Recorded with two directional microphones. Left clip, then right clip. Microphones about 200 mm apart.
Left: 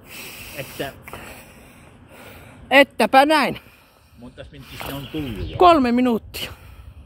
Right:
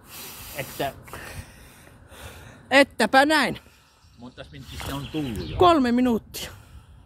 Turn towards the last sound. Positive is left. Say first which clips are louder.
# left 3 dB
turn(degrees=0)  # may be behind; listen again after turning